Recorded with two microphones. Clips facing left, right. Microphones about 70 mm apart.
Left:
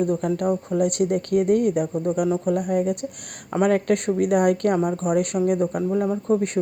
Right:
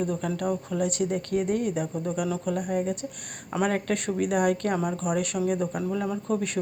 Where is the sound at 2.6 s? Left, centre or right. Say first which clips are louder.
Left 5 dB; left.